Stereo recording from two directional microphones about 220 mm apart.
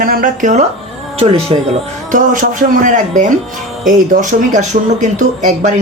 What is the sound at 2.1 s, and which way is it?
Speech, 35° right (ahead or behind).